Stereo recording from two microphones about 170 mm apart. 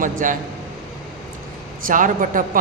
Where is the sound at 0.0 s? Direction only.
50° right (ahead or behind).